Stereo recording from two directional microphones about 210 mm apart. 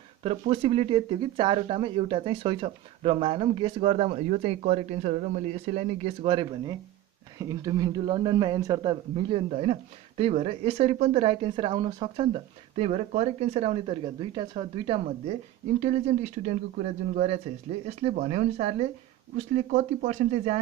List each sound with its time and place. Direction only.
0.2 s speech: 25° right (ahead or behind)
16.4 s speech: 35° right (ahead or behind)